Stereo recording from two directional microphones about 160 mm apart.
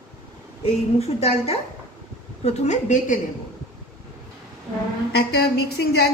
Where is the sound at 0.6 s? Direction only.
40° left (ahead or behind).